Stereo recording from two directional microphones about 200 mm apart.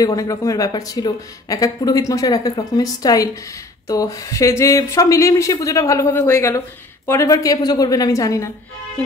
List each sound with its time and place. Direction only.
0.0 s speech: 15° left (ahead or behind)